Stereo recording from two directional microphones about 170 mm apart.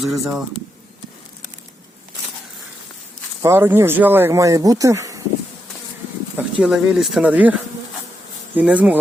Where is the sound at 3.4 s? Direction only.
15° right (ahead or behind).